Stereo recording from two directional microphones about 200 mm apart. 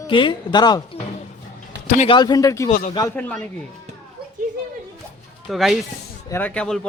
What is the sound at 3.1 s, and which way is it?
Speech, 5° left (ahead or behind).